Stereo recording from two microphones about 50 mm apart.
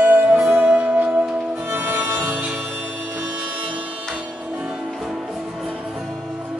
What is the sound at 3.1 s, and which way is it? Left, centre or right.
Music, right.